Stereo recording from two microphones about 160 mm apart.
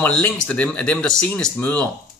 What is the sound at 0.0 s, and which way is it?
Speech, 10° left (ahead or behind).